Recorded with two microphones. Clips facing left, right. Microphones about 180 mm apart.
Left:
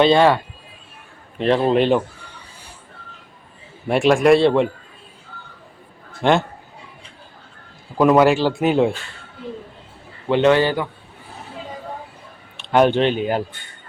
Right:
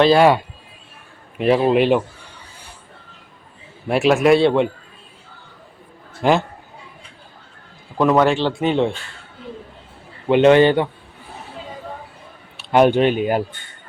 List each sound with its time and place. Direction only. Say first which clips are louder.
0.0 s speech: right 1 dB; 5° right (ahead or behind)
1.4 s speech: right 1 dB; 5° right (ahead or behind)
3.8 s speech: even; 5° right (ahead or behind)
6.2 s speech: even; 5° right (ahead or behind)
7.9 s speech: left 2 dB; 5° left (ahead or behind)
10.2 s a man's voice: right 4 dB; 15° right (ahead or behind)
12.7 s speech: right 2 dB; 10° right (ahead or behind)